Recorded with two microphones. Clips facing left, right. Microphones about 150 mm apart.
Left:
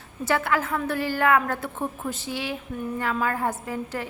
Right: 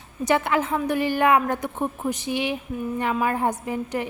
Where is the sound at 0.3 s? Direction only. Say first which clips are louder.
Right 3 dB; 20° right (ahead or behind).